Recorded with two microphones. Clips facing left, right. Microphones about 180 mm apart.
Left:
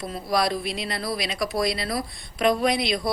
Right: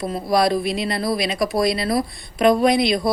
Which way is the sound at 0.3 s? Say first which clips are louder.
Right 5 dB; 50° right (ahead or behind).